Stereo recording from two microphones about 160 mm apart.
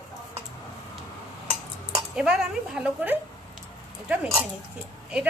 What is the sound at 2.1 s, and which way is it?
A woman's voice, 5° right (ahead or behind).